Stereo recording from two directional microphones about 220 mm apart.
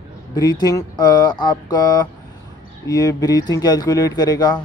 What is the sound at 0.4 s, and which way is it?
A man's voice, 15° left (ahead or behind).